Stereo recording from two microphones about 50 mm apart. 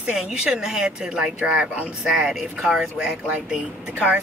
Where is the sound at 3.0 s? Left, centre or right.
Right.